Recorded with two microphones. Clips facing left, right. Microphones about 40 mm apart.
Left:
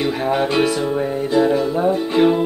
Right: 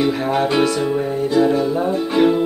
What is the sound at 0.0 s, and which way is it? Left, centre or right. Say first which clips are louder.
Music: right 1 dB; centre.